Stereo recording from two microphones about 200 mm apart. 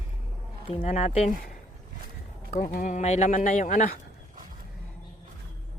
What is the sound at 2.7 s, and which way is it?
Speech, 40° left (ahead or behind).